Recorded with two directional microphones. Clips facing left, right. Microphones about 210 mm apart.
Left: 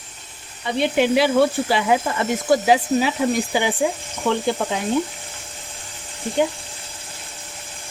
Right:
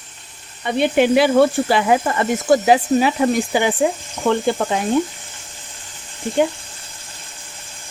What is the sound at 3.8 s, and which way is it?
Speech, 60° right (ahead or behind).